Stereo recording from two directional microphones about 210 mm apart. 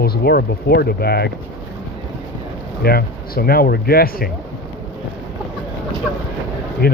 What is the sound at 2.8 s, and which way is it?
Speech, 45° left (ahead or behind).